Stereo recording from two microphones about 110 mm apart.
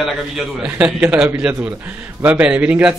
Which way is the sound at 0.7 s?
15° right (ahead or behind).